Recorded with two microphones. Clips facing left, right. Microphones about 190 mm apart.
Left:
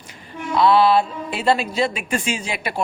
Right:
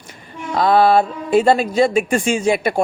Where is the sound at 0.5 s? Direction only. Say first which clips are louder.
Right 2 dB; 45° right (ahead or behind).